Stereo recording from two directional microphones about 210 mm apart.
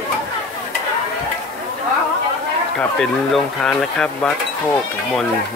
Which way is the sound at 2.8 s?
5° left (ahead or behind).